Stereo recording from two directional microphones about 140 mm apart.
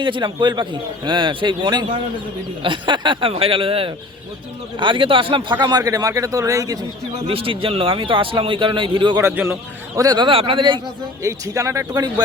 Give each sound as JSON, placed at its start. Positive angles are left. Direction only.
{"t": 0.0, "sound": "a man's voice", "side_deg": -35}
{"t": 5.6, "sound": "speech", "side_deg": -25}
{"t": 7.3, "sound": "a man's voice", "side_deg": -40}
{"t": 9.1, "sound": "speech", "side_deg": -15}
{"t": 10.2, "sound": "a man's voice", "side_deg": -40}
{"t": 11.2, "sound": "speech", "side_deg": -20}